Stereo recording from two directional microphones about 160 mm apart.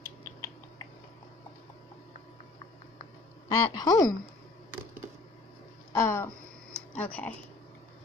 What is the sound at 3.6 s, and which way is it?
Speech, 25° left (ahead or behind).